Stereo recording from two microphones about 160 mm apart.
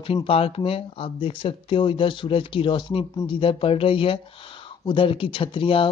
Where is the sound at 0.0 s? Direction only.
35° left (ahead or behind).